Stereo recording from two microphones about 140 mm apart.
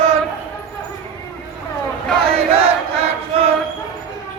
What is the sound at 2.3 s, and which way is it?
Crowd, 45° right (ahead or behind).